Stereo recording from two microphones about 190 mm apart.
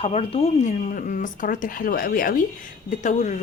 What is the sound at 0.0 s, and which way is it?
A woman's voice, 30° left (ahead or behind).